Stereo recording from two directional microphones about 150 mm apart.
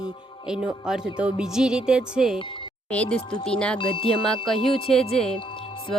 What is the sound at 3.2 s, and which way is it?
Speech, 35° left (ahead or behind).